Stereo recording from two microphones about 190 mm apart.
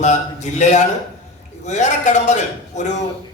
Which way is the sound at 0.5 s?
40° left (ahead or behind).